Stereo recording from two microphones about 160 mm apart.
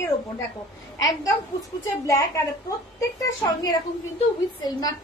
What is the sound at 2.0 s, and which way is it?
Speech, 20° left (ahead or behind).